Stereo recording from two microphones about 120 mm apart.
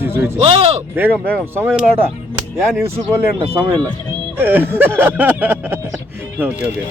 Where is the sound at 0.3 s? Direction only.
55° right (ahead or behind).